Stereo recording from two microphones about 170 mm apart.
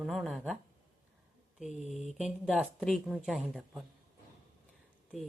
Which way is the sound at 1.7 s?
45° left (ahead or behind).